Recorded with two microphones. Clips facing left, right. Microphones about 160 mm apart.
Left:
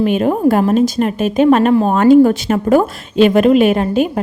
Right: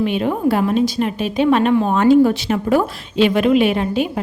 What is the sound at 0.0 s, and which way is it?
A woman's voice, 45° left (ahead or behind).